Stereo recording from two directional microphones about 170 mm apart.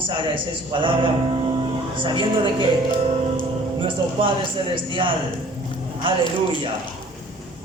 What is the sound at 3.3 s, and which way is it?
Music, 30° right (ahead or behind).